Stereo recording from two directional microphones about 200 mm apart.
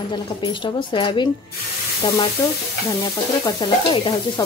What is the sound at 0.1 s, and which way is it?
Speech, 25° left (ahead or behind).